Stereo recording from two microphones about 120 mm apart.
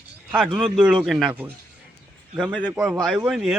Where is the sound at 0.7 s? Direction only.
10° right (ahead or behind).